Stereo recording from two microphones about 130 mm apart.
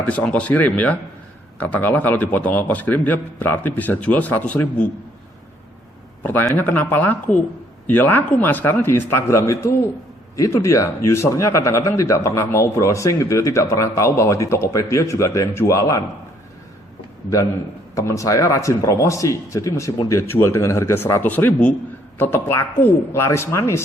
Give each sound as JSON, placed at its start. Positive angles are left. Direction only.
{"t": 0.0, "sound": "a man's voice", "side_deg": 10}
{"t": 6.5, "sound": "a man's voice", "side_deg": 15}
{"t": 17.9, "sound": "a man's voice", "side_deg": 25}